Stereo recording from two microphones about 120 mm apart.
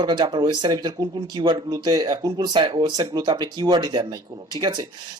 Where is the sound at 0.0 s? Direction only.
40° right (ahead or behind).